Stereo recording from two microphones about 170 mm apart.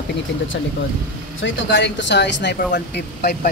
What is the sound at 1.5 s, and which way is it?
Speech, 90° left.